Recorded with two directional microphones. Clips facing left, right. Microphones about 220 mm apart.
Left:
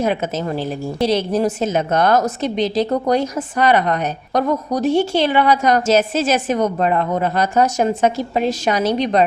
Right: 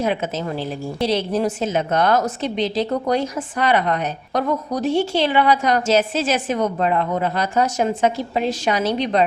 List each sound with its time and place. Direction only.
0.0 s a woman's voice: 45° left (ahead or behind)